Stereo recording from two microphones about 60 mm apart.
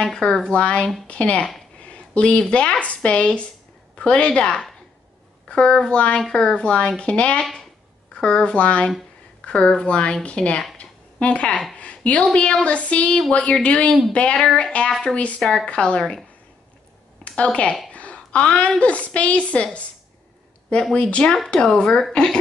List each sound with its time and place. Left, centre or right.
0.0 s a woman's voice: centre
10.8 s a sound: left
11.7 s speech: left
14.9 s a woman's voice: centre
15.1 s a woman's voice: centre
17.2 s a woman's voice: centre
20.9 s a woman's voice: centre